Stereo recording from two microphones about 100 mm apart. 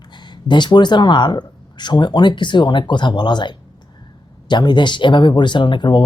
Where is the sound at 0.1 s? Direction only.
50° left (ahead or behind).